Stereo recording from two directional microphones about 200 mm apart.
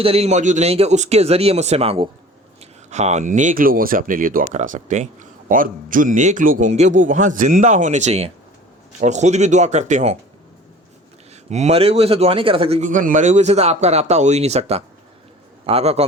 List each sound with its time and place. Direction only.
0.0 s speech: 30° right (ahead or behind)
11.4 s speech: 35° right (ahead or behind)